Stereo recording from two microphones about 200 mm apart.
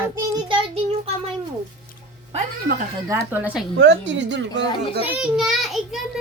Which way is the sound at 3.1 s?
10° right (ahead or behind).